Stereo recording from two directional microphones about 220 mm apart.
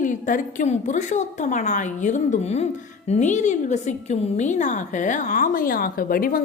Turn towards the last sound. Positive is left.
turn(degrees=40)  # may be behind; listen again after turning